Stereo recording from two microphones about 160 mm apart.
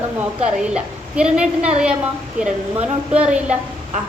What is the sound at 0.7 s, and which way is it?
A woman's voice, 5° right (ahead or behind).